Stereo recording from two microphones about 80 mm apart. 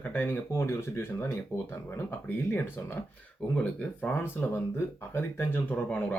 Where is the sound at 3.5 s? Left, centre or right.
Left.